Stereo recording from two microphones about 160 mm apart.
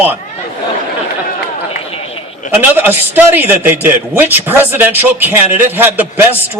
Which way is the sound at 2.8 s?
10° right (ahead or behind).